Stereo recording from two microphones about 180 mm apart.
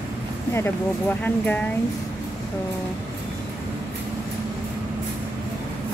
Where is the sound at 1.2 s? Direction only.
10° left (ahead or behind).